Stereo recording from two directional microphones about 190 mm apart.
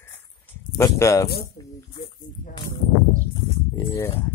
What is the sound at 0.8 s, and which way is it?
Speech, 15° left (ahead or behind).